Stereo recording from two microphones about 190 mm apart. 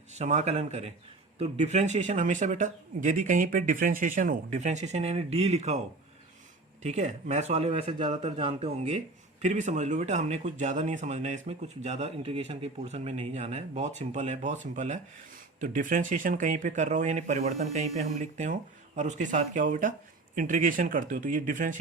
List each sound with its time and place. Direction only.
0.1 s speech: 35° right (ahead or behind)
6.8 s speech: 35° right (ahead or behind)